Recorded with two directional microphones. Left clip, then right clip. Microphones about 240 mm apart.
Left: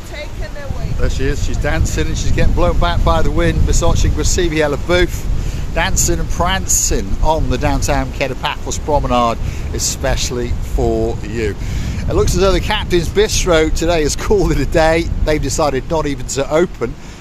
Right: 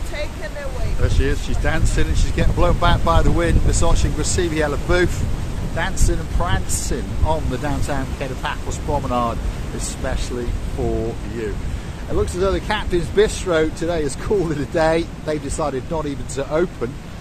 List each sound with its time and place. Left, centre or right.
1.0 s speech: left
12.2 s speech: left